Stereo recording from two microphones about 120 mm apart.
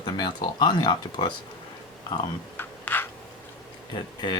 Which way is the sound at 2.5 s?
15° left (ahead or behind).